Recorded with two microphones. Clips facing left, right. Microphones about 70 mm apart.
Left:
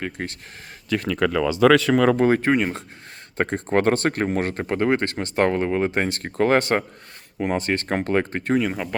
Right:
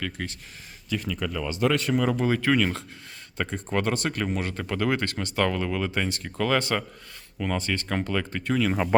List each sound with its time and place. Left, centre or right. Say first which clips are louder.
0.2 s speech: left 4 dB; left
0.9 s speech: left 8 dB; left
2.1 s speech: left 5 dB; left